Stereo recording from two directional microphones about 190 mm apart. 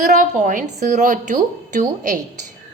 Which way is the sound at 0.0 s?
45° right (ahead or behind).